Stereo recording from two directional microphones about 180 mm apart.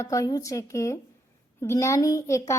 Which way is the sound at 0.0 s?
15° left (ahead or behind).